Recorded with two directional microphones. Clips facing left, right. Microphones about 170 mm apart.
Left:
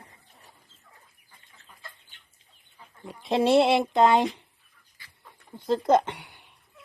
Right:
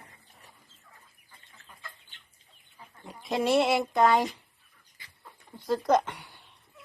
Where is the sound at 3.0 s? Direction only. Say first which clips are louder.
Left 4 dB; 25° left (ahead or behind).